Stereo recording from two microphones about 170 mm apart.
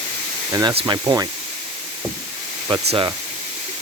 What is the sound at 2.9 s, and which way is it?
Speech, 25° right (ahead or behind).